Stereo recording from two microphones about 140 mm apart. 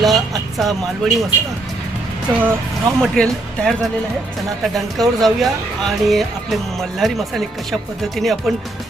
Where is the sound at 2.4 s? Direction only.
15° right (ahead or behind).